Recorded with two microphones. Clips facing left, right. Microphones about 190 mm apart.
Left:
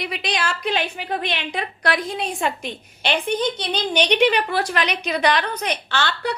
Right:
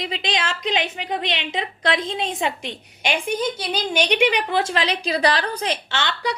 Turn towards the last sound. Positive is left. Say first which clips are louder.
# left 1 dB
turn(degrees=-20)  # may be behind; listen again after turning